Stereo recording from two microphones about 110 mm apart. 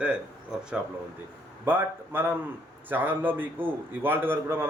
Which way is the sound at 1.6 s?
20° right (ahead or behind).